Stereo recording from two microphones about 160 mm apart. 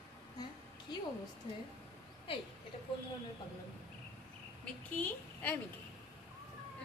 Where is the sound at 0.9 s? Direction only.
25° left (ahead or behind).